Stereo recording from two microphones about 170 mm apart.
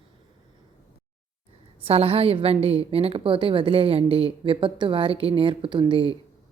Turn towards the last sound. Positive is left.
turn(degrees=-30)  # may be behind; listen again after turning